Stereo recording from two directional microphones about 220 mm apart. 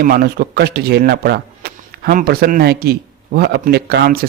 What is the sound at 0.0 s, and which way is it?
Speech, 40° right (ahead or behind).